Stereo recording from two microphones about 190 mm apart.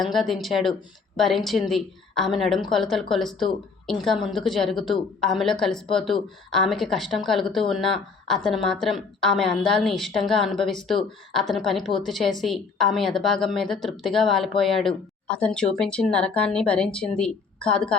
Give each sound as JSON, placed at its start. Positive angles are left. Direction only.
{"t": 0.0, "sound": "a woman's voice", "side_deg": 0}